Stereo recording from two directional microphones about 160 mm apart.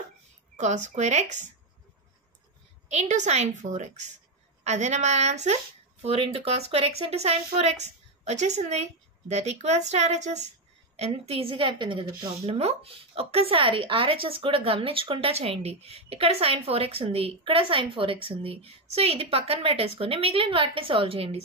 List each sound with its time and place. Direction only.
0.6 s speech: 50° right (ahead or behind)
2.9 s speech: 45° right (ahead or behind)